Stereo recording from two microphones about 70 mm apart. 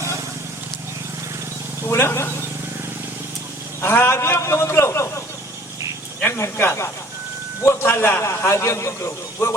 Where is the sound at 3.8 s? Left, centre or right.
Left.